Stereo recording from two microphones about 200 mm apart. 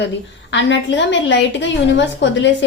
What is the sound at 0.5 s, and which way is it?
A woman's voice, 65° left (ahead or behind).